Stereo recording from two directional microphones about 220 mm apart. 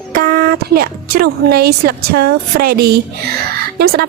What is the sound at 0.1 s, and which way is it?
A woman's voice, 40° right (ahead or behind).